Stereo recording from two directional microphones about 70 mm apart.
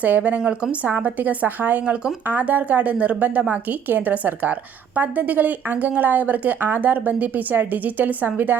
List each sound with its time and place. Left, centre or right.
0.0 s speech: right